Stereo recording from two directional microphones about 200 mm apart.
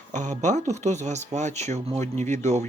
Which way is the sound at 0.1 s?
35° right (ahead or behind).